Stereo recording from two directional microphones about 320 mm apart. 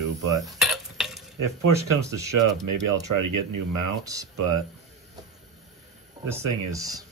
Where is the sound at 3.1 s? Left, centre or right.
Right.